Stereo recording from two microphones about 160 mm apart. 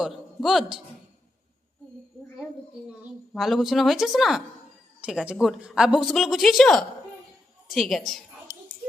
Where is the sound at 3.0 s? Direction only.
Centre (ahead or behind).